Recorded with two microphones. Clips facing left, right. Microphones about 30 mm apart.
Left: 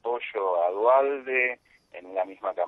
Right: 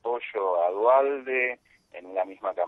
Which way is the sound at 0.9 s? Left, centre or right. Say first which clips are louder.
Even; centre.